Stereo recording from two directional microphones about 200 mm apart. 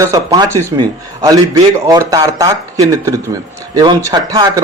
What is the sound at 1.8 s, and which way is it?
A man's voice, 15° right (ahead or behind).